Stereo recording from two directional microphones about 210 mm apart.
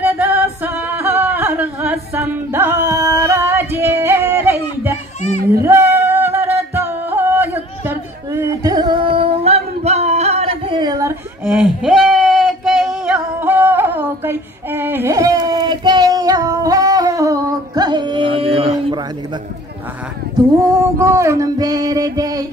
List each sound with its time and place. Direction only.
0.0 s singing: 5° right (ahead or behind)
5.6 s music: 10° right (ahead or behind)
21.0 s a sound: 15° right (ahead or behind)